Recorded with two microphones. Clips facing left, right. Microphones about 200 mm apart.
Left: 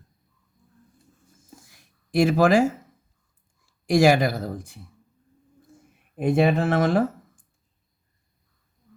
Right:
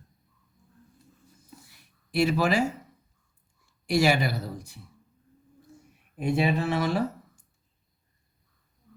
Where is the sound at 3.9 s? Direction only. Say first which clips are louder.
Left 6 dB; 50° left (ahead or behind).